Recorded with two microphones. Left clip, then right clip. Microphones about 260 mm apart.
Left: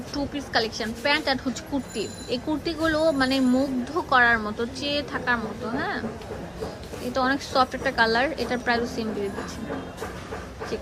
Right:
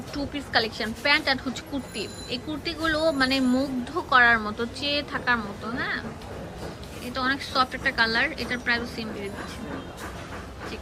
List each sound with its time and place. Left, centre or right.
0.1 s speech: centre
7.1 s speech: centre